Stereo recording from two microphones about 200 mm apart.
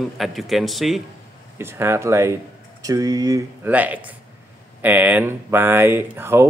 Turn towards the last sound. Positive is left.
turn(degrees=-10)  # may be behind; listen again after turning